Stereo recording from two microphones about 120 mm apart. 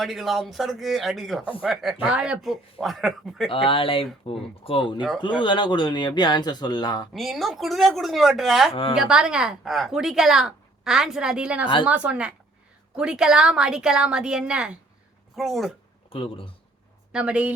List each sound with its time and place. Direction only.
0.0 s a woman's voice: centre (ahead or behind)
3.5 s speech: 50° left (ahead or behind)
7.1 s a woman's voice: centre (ahead or behind)
8.7 s speech: 50° left (ahead or behind)
9.0 s a woman's voice: 5° right (ahead or behind)
16.0 s speech: 50° left (ahead or behind)
17.1 s a woman's voice: 10° right (ahead or behind)